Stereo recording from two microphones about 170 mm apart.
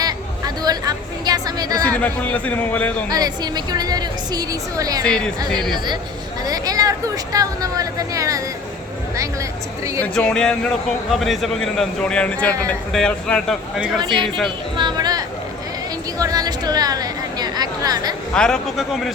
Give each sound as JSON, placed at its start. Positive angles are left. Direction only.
{"t": 0.0, "sound": "a sound", "side_deg": -25}
{"t": 2.0, "sound": "a man's voice", "side_deg": 10}
{"t": 3.1, "sound": "a woman's voice", "side_deg": -25}
{"t": 5.0, "sound": "a man's voice", "side_deg": 5}
{"t": 5.7, "sound": "a woman's voice", "side_deg": -25}
{"t": 10.0, "sound": "a man's voice", "side_deg": 5}
{"t": 14.8, "sound": "a sound", "side_deg": -25}
{"t": 16.1, "sound": "a woman's voice", "side_deg": -20}
{"t": 18.3, "sound": "a man's voice", "side_deg": 5}